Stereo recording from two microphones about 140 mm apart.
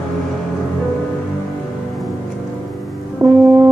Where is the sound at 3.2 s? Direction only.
25° right (ahead or behind).